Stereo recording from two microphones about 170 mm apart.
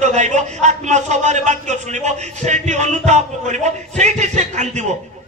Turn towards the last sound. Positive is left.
turn(degrees=-45)  # may be behind; listen again after turning